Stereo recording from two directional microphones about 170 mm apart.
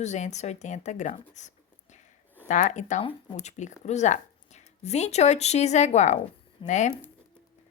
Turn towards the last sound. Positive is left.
turn(degrees=45)  # may be behind; listen again after turning